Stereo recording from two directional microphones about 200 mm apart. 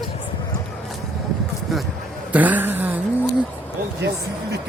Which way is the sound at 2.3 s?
10° right (ahead or behind).